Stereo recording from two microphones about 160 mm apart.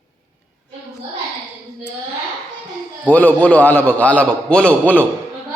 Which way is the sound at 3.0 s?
10° left (ahead or behind).